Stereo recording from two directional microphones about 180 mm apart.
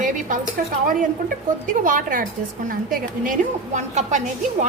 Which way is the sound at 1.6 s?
45° right (ahead or behind).